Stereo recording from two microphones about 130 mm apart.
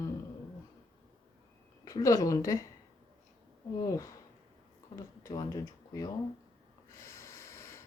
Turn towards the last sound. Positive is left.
turn(degrees=20)  # may be behind; listen again after turning